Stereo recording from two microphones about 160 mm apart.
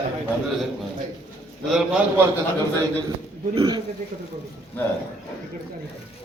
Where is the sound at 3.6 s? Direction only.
25° right (ahead or behind).